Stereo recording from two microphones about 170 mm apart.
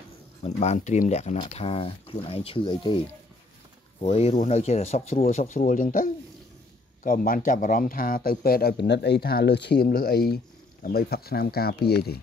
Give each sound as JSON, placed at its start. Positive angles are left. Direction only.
{"t": 0.4, "sound": "speech", "side_deg": 40}
{"t": 4.0, "sound": "speech", "side_deg": 35}